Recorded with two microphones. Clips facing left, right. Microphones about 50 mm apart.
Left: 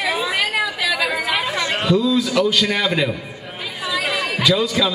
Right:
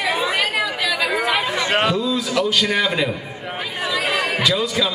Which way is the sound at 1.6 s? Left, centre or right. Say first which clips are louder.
Right 4 dB; right.